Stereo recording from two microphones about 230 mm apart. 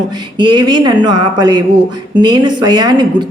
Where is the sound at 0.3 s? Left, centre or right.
Centre.